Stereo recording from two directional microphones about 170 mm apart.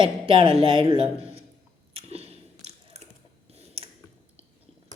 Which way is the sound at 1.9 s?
35° right (ahead or behind).